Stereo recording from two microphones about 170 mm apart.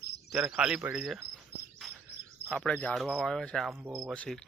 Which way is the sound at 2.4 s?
5° left (ahead or behind).